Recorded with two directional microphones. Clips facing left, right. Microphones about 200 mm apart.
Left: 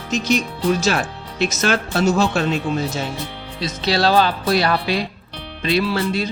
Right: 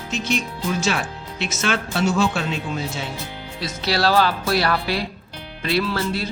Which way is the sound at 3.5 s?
20° left (ahead or behind).